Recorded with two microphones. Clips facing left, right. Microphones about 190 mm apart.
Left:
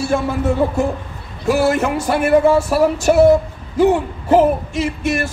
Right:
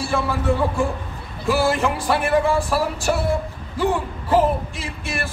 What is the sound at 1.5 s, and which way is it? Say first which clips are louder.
Music: left 4 dB; 45° left (ahead or behind).